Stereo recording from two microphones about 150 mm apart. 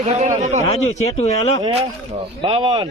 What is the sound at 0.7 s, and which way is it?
Speech, 45° left (ahead or behind).